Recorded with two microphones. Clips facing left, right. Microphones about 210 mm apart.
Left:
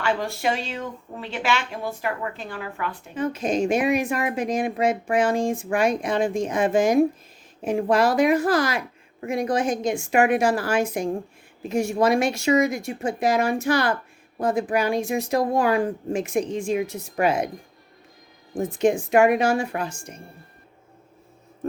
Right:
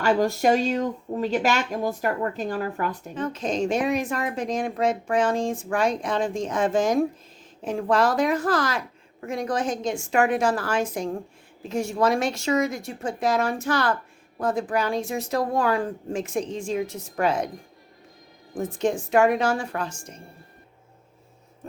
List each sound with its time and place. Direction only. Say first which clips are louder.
0.0 s speech: right 4 dB; 40° right (ahead or behind)
3.2 s speech: left 3 dB; 10° left (ahead or behind)
18.6 s speech: left 4 dB; 10° left (ahead or behind)